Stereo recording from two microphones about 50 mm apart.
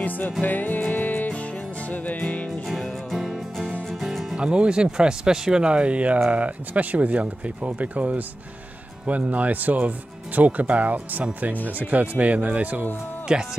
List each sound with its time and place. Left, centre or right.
0.4 s music: left
2.7 s music: centre
4.4 s speech: centre
13.3 s speech: centre